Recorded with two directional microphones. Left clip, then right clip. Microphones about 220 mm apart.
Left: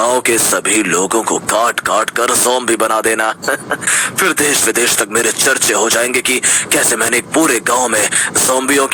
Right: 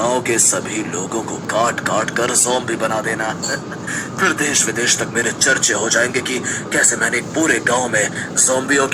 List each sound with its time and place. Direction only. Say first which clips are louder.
0.0 s speech: left 4 dB; 60° left (ahead or behind)